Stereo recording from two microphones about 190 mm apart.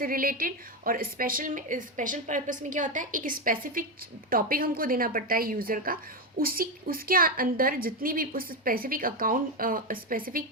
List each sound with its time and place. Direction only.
0.0 s a woman's voice: 50° right (ahead or behind)